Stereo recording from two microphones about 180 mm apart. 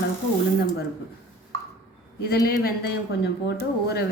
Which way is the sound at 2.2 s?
55° left (ahead or behind).